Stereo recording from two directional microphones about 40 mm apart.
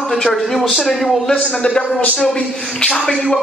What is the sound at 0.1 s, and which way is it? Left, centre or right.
Speech, centre.